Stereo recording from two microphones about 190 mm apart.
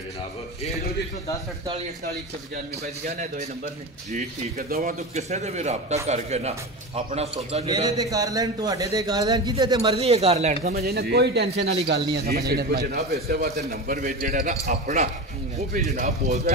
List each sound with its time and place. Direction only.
4.1 s speech: 45° right (ahead or behind)
5.1 s speech: 35° right (ahead or behind)
7.6 s a man's voice: 20° right (ahead or behind)
9.9 s speech: 35° right (ahead or behind)
10.6 s speech: 55° right (ahead or behind)
13.7 s speech: 45° right (ahead or behind)